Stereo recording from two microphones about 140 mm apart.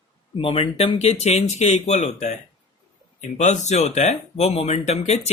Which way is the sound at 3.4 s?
55° left (ahead or behind).